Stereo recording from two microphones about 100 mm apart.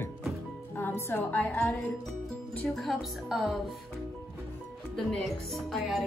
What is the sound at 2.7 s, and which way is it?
Speech, centre (ahead or behind).